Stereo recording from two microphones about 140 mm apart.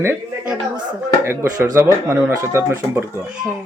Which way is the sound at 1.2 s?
20° right (ahead or behind).